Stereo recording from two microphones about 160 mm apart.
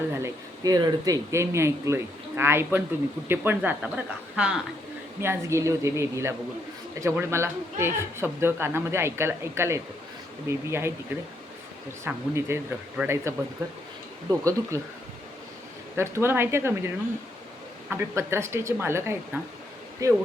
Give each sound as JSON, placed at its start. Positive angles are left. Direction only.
{"t": 0.1, "sound": "speech", "side_deg": -20}
{"t": 12.0, "sound": "speech", "side_deg": -15}
{"t": 16.0, "sound": "speech", "side_deg": -15}